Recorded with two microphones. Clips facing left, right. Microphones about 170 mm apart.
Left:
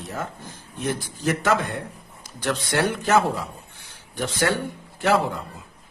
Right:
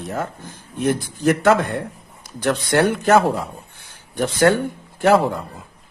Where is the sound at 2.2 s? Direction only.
55° right (ahead or behind).